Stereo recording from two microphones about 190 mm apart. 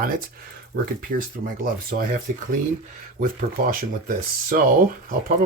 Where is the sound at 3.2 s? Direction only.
50° right (ahead or behind).